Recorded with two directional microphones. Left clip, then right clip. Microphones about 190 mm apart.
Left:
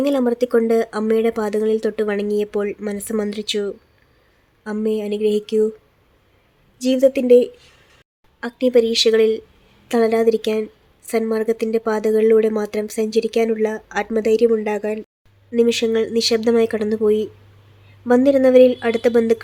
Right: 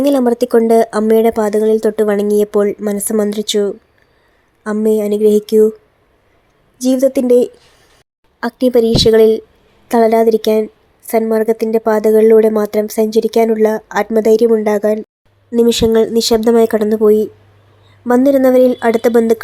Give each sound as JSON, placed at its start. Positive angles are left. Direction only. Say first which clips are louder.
{"t": 0.0, "sound": "speech", "louder": "right 6 dB", "side_deg": -20}
{"t": 6.7, "sound": "a woman's voice", "louder": "right 3 dB", "side_deg": -15}